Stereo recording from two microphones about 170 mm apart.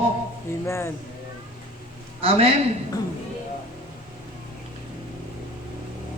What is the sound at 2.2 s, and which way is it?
Speech, 35° right (ahead or behind).